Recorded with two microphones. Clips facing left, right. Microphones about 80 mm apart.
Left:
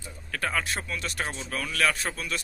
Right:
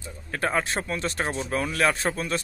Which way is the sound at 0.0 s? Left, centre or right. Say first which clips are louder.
Right 4 dB; right.